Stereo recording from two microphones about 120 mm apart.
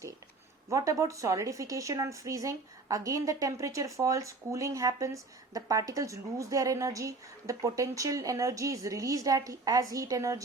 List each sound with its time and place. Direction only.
0.7 s a woman's voice: 25° right (ahead or behind)